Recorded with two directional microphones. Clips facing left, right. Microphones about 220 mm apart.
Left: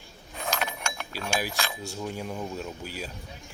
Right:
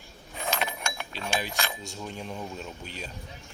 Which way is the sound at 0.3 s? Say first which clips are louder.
Even; centre (ahead or behind).